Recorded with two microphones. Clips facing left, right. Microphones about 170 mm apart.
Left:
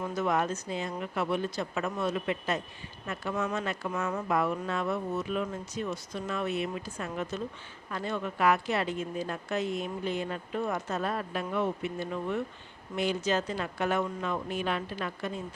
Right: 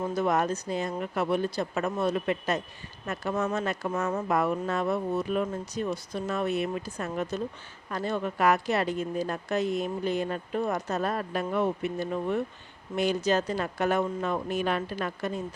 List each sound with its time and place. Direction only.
0.0 s a woman's voice: 35° right (ahead or behind)